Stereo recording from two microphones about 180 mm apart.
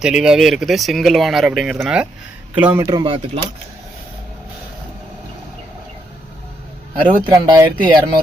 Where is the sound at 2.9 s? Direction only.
30° right (ahead or behind).